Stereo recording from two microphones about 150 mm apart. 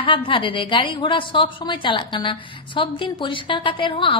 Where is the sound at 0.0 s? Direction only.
35° left (ahead or behind).